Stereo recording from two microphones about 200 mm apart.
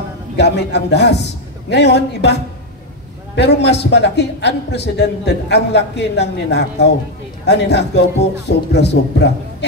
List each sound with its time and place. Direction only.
0.4 s a man's voice: 55° left (ahead or behind)
3.3 s a man's voice: 60° left (ahead or behind)